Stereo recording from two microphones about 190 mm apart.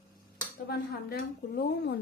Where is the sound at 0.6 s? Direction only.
55° left (ahead or behind).